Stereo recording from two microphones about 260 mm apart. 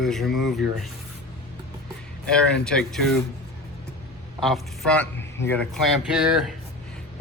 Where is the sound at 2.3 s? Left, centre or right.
Centre.